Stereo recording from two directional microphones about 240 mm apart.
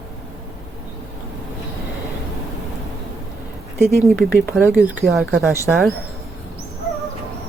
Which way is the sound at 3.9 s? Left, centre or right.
Centre.